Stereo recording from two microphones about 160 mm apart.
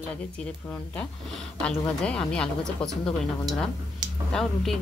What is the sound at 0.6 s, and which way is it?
A woman's voice, 10° left (ahead or behind).